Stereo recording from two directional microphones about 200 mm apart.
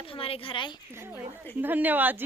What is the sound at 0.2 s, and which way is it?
Speech, 25° left (ahead or behind).